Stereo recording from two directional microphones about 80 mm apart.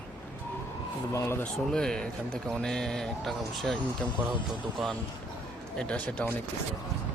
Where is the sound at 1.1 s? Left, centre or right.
Left.